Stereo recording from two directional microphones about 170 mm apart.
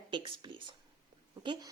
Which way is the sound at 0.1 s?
30° right (ahead or behind).